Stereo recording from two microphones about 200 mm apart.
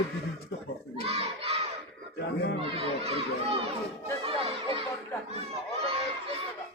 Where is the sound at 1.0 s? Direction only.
30° right (ahead or behind).